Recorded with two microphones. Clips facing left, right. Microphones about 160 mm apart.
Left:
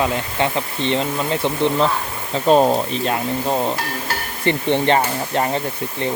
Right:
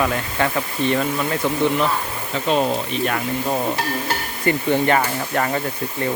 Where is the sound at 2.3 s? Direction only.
40° left (ahead or behind).